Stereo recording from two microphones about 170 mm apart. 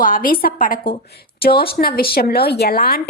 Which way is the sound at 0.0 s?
55° left (ahead or behind).